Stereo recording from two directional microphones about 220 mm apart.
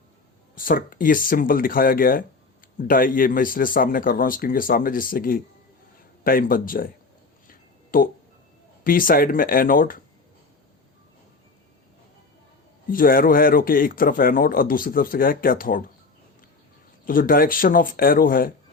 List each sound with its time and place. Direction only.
0.5 s a man's voice: 40° left (ahead or behind)
7.4 s a sound: 40° left (ahead or behind)
8.8 s a man's voice: 40° left (ahead or behind)
12.9 s a man's voice: 40° left (ahead or behind)
17.1 s a man's voice: 40° left (ahead or behind)